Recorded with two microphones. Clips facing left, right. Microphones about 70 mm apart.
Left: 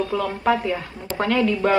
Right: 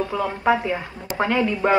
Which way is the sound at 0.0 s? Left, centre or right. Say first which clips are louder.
Even; right.